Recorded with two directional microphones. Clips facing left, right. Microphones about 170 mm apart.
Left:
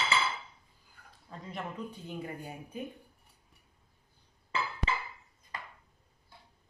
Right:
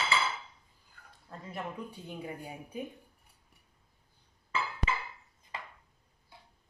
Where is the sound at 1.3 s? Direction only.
5° right (ahead or behind).